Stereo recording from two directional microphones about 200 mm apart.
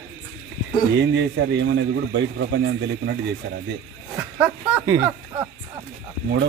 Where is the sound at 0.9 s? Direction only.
60° right (ahead or behind).